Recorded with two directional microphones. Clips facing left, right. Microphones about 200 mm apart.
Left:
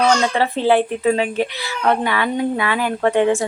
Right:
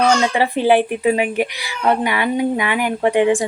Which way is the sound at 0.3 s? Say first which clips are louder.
Right 1 dB; 15° right (ahead or behind).